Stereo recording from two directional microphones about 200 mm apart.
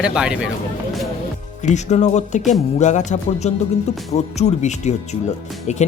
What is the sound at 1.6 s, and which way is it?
Speech, 35° left (ahead or behind).